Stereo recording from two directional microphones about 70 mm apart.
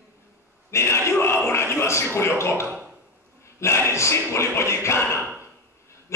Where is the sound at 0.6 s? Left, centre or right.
Left.